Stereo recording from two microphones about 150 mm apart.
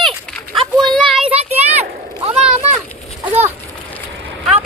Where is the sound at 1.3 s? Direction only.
45° right (ahead or behind).